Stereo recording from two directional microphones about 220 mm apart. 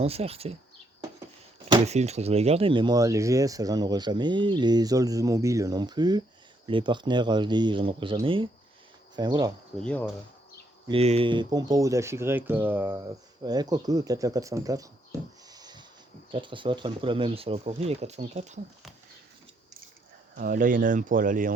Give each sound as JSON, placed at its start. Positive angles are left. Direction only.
{"t": 0.0, "sound": "speech", "side_deg": -25}
{"t": 1.7, "sound": "speech", "side_deg": -30}
{"t": 9.7, "sound": "speech", "side_deg": 5}
{"t": 10.8, "sound": "speech", "side_deg": -25}
{"t": 20.3, "sound": "speech", "side_deg": -40}